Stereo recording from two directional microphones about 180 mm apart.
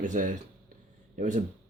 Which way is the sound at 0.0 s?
45° right (ahead or behind).